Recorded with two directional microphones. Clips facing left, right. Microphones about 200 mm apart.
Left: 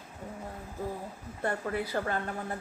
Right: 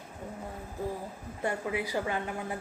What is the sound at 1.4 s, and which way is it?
A woman's voice, 10° right (ahead or behind).